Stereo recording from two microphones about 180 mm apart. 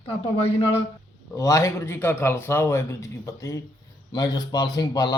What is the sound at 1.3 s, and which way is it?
A man's voice, 15° left (ahead or behind).